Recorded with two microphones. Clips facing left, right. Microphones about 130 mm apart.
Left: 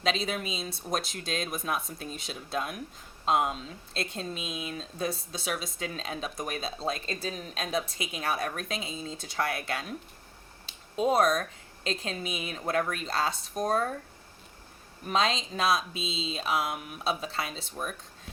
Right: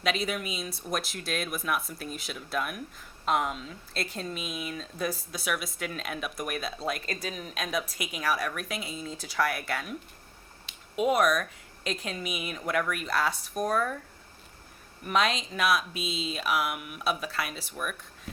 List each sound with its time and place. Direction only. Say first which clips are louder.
0.0 s speech: even; 25° left (ahead or behind)
15.0 s speech: right 1 dB; 25° left (ahead or behind)